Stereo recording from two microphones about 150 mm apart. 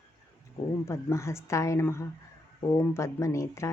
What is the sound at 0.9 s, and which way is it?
Speech, 20° left (ahead or behind).